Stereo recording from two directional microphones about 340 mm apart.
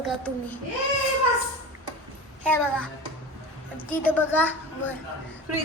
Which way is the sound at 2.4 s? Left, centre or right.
Centre.